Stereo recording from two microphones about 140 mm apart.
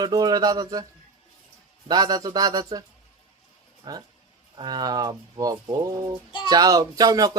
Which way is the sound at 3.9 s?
30° right (ahead or behind).